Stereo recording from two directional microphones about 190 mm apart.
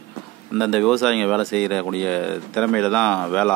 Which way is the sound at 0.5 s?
Centre (ahead or behind).